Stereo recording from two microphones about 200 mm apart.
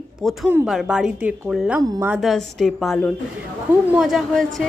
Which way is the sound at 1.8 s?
15° right (ahead or behind).